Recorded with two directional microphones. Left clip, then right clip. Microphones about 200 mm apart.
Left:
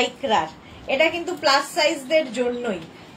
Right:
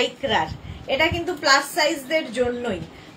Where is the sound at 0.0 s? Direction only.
15° right (ahead or behind).